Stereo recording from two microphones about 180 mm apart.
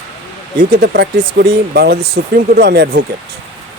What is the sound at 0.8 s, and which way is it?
Speech, 65° right (ahead or behind).